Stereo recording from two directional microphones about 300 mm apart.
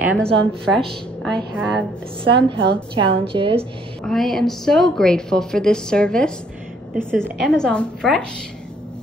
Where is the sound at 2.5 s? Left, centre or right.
Centre.